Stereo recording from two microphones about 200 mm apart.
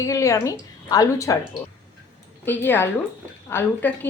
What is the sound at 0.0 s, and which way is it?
A woman's voice, 15° left (ahead or behind).